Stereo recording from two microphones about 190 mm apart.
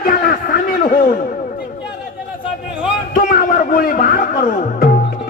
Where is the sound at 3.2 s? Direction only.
50° left (ahead or behind).